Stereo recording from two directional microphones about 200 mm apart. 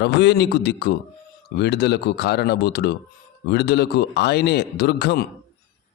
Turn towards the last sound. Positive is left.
turn(degrees=55)  # may be behind; listen again after turning